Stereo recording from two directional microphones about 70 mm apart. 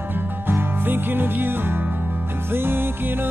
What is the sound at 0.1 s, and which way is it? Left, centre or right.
Music, right.